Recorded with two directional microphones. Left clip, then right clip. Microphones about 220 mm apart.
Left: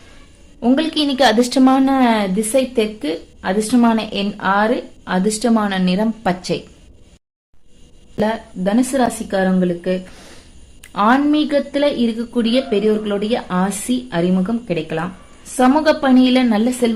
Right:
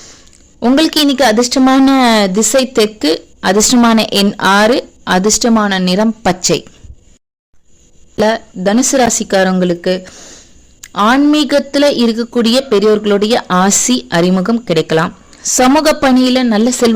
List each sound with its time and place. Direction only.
0.6 s a man's voice: 40° right (ahead or behind)
2.0 s a woman's voice: 45° right (ahead or behind)
8.2 s a woman's voice: 35° right (ahead or behind)
10.8 s a man's voice: 30° right (ahead or behind)
16.2 s a woman's voice: 25° right (ahead or behind)